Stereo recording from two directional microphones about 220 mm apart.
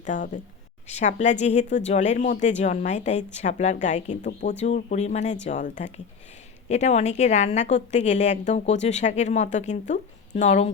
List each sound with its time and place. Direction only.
0.0 s a woman's voice: 35° left (ahead or behind)